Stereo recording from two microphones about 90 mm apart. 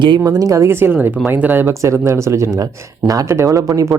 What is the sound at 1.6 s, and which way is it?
Speech, 35° right (ahead or behind).